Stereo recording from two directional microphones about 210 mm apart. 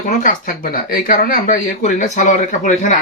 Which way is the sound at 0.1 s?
40° left (ahead or behind).